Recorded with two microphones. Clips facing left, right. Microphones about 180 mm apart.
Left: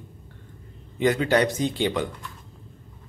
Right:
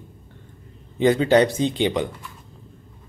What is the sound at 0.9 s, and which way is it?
Speech, 30° right (ahead or behind).